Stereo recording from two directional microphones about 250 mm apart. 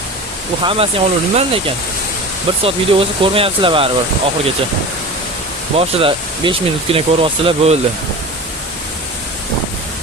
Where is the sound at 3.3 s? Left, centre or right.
Right.